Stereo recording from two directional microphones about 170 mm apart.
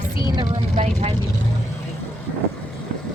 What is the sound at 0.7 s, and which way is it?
Vehicle, 40° right (ahead or behind).